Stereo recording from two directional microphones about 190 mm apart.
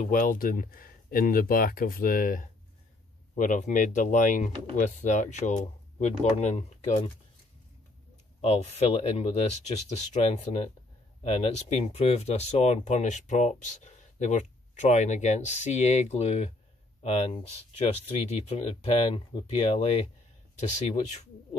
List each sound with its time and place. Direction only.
0.0 s speech: 45° left (ahead or behind)
8.4 s speech: 30° left (ahead or behind)